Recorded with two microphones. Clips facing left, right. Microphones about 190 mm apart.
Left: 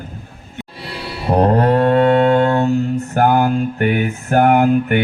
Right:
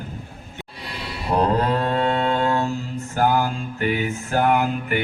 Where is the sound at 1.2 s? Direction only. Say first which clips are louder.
Left 6 dB; 55° left (ahead or behind).